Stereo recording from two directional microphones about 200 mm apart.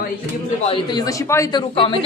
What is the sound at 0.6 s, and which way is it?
A man's voice, 25° left (ahead or behind).